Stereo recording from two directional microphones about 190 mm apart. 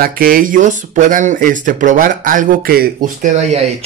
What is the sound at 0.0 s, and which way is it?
Speech, 50° right (ahead or behind).